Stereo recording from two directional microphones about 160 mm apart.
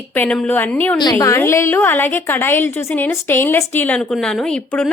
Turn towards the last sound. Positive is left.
turn(degrees=10)  # may be behind; listen again after turning